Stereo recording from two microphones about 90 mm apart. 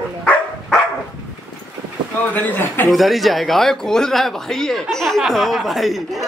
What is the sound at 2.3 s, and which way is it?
Speech, 20° left (ahead or behind).